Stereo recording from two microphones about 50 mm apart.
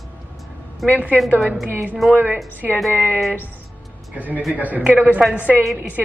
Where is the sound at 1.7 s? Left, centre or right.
Right.